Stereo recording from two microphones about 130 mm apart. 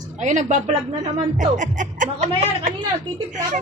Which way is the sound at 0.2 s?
70° right (ahead or behind).